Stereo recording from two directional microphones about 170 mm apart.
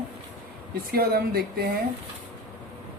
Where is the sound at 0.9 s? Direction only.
65° right (ahead or behind).